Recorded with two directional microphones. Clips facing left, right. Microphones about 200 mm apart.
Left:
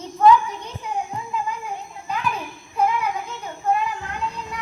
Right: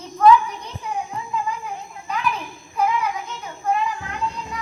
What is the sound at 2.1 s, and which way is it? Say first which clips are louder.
Children playing: right 1 dB; 30° left (ahead or behind).